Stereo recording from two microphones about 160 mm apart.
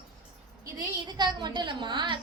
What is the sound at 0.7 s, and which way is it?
A woman's voice, 25° right (ahead or behind).